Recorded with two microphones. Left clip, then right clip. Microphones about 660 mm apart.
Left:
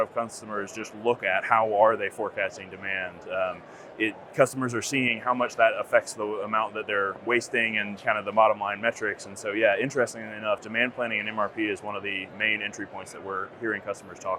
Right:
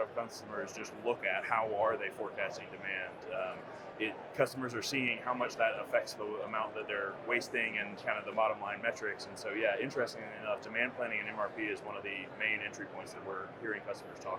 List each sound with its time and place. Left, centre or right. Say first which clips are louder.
0.0 s speech: left 9 dB; left